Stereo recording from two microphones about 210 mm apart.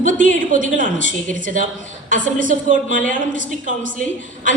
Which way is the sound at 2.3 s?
40° right (ahead or behind).